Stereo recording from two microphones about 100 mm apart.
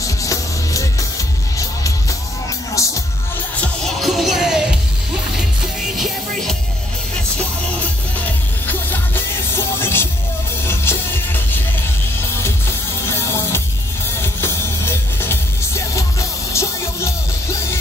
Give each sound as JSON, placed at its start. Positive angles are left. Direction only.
{"t": 0.0, "sound": "music", "side_deg": 35}
{"t": 2.8, "sound": "music", "side_deg": 30}
{"t": 3.6, "sound": "music", "side_deg": 5}
{"t": 8.6, "sound": "music", "side_deg": 20}
{"t": 13.0, "sound": "music", "side_deg": 30}